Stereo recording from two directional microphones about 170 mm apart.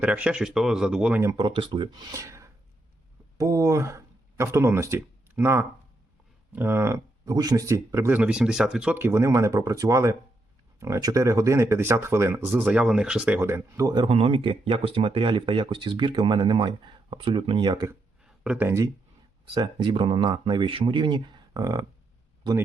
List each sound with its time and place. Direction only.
0.0 s speech: 10° right (ahead or behind)
1.2 s speech: 20° right (ahead or behind)
18.2 s a sound: 5° right (ahead or behind)
19.5 s speech: 30° right (ahead or behind)